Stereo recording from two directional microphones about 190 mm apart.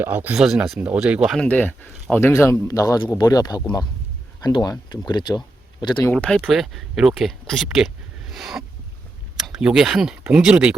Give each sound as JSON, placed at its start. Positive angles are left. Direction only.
{"t": 0.0, "sound": "speech", "side_deg": -10}
{"t": 6.1, "sound": "speech", "side_deg": 5}